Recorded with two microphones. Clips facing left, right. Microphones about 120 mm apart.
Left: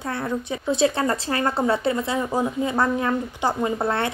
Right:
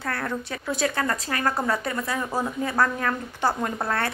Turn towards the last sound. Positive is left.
turn(degrees=25)  # may be behind; listen again after turning